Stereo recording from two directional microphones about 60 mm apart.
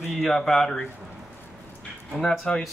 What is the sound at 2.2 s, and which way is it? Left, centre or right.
Speech, centre.